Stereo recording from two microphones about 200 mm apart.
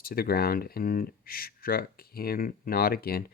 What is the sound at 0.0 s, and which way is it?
Speech, 45° left (ahead or behind).